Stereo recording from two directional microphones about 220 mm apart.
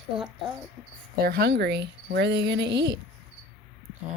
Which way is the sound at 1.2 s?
45° right (ahead or behind).